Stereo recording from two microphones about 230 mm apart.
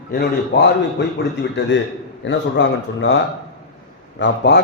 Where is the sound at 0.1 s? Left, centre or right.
Left.